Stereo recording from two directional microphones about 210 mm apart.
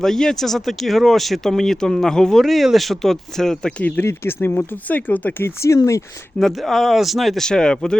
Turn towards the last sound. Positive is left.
turn(degrees=5)  # may be behind; listen again after turning